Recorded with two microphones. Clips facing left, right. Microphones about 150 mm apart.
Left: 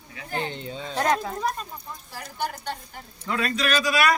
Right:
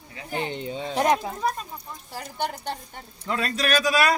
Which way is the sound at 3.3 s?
35° right (ahead or behind).